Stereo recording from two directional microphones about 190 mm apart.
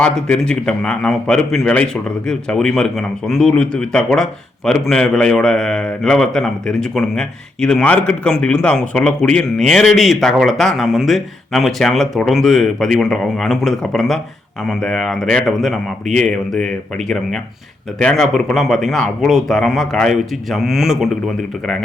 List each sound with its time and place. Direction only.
0.0 s a man's voice: 5° left (ahead or behind)